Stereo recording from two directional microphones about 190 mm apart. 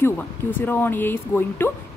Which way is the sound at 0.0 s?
10° left (ahead or behind).